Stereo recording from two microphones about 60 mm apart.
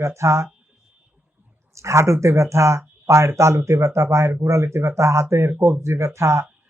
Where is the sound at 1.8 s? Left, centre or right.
Right.